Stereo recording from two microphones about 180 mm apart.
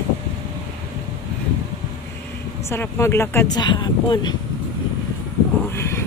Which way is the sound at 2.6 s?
15° left (ahead or behind).